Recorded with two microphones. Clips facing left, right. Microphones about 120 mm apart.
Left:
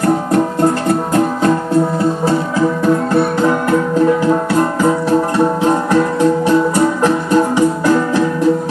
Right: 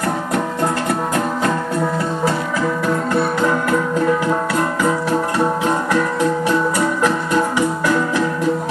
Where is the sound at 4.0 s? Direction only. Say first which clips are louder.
Left 5 dB; 30° left (ahead or behind).